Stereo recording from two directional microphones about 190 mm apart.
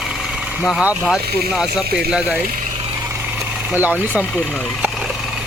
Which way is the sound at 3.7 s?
10° right (ahead or behind).